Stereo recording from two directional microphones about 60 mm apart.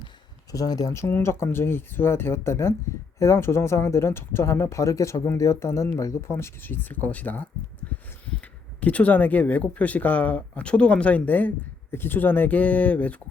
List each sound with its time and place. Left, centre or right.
0.5 s speech: left
0.9 s speech: left
4.8 s speech: left
6.3 s speech: left
8.8 s speech: left